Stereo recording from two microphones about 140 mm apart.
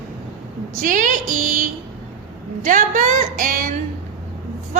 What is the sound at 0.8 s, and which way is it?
Speech, 70° right (ahead or behind).